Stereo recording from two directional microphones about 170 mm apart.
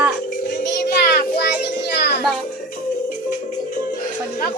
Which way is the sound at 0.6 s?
80° left.